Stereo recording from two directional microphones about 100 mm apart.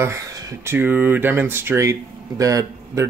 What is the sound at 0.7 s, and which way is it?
Speech, 15° right (ahead or behind).